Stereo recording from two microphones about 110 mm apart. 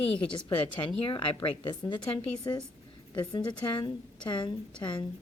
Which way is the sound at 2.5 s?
30° left (ahead or behind).